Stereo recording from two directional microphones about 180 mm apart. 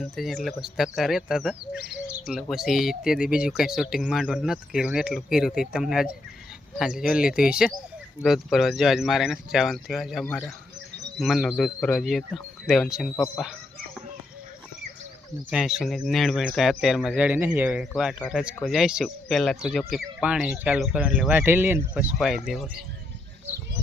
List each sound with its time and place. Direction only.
0.0 s speech: centre (ahead or behind)
15.4 s speech: centre (ahead or behind)